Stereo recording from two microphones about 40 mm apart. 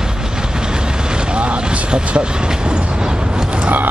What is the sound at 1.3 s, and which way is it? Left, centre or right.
Speech, right.